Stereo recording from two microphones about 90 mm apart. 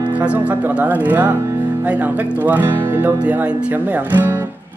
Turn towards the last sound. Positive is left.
turn(degrees=-20)  # may be behind; listen again after turning